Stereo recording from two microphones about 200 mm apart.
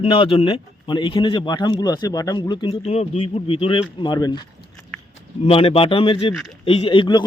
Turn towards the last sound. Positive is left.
turn(degrees=20)  # may be behind; listen again after turning